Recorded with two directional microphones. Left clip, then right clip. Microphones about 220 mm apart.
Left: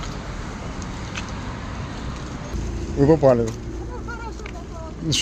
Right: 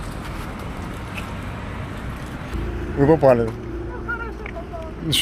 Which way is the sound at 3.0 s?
20° left (ahead or behind).